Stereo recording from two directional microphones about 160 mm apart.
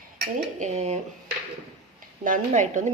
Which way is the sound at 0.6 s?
45° right (ahead or behind).